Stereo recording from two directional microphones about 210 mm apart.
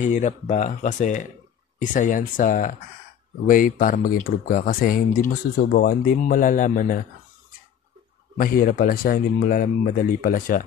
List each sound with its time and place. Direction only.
0.0 s speech: 35° left (ahead or behind)
8.4 s speech: 45° left (ahead or behind)